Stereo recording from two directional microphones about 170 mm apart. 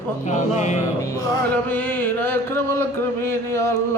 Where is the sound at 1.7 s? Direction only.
10° left (ahead or behind).